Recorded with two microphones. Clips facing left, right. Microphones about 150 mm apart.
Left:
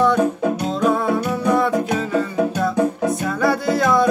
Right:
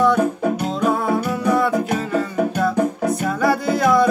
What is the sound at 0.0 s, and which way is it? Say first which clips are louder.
Music: even; centre (ahead or behind).